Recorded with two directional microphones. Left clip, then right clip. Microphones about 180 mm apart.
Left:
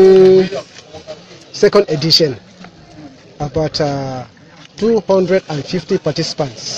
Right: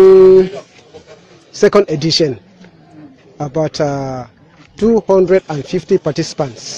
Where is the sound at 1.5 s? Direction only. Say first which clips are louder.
Right 1 dB; 60° right (ahead or behind).